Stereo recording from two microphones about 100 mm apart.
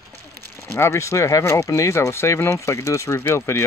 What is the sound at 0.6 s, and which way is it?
Speech, 25° left (ahead or behind).